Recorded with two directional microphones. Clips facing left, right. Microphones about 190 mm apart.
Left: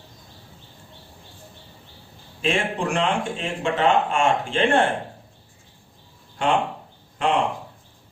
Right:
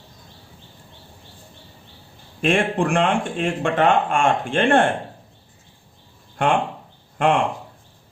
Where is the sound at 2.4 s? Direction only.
55° right (ahead or behind).